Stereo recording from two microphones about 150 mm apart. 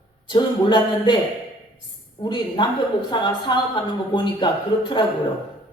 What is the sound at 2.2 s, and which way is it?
A woman's voice, 30° left (ahead or behind).